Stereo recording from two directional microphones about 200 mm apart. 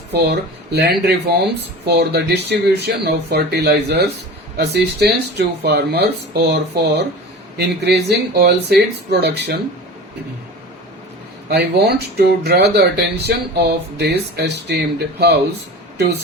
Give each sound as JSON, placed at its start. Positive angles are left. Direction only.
{"t": 0.1, "sound": "speech", "side_deg": -55}
{"t": 11.4, "sound": "speech", "side_deg": -55}